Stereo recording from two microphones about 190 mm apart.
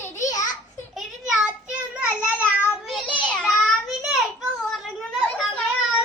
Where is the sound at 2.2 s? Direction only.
5° right (ahead or behind).